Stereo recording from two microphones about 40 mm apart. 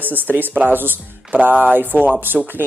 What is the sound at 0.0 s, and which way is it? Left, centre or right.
Speech, right.